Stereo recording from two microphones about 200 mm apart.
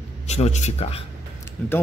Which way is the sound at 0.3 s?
35° left (ahead or behind).